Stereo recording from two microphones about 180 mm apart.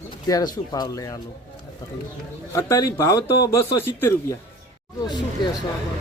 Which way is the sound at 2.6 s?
15° left (ahead or behind).